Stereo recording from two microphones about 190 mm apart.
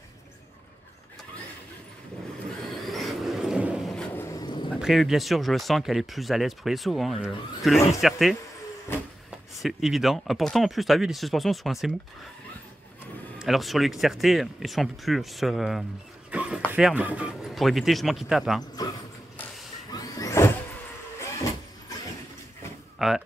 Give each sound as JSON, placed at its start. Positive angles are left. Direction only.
{"t": 2.8, "sound": "vehicle", "side_deg": 0}
{"t": 4.7, "sound": "speech", "side_deg": -5}
{"t": 9.6, "sound": "speech", "side_deg": 0}
{"t": 13.4, "sound": "speech", "side_deg": 0}
{"t": 16.3, "sound": "a sound", "side_deg": -5}
{"t": 16.7, "sound": "speech", "side_deg": -5}
{"t": 18.8, "sound": "speech", "side_deg": 20}
{"t": 19.9, "sound": "vehicle", "side_deg": 20}
{"t": 22.9, "sound": "a sound", "side_deg": 0}